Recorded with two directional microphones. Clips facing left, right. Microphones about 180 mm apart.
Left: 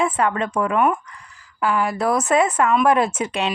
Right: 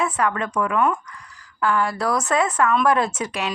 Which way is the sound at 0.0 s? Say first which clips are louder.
Left 2 dB; 25° left (ahead or behind).